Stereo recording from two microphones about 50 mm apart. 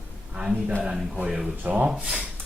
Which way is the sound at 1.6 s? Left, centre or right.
Right.